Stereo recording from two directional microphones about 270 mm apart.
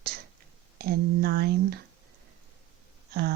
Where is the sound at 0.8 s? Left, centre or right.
Right.